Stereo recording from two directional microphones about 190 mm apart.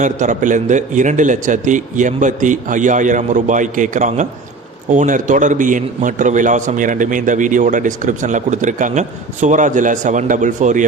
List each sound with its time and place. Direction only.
0.0 s a man's voice: 40° right (ahead or behind)